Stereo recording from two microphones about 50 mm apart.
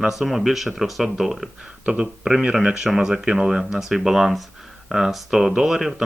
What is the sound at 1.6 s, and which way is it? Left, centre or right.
Speech, centre.